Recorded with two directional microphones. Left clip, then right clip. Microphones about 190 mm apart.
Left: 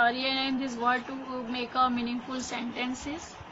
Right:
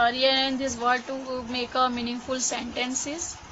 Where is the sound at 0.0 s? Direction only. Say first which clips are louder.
Right 5 dB; 60° right (ahead or behind).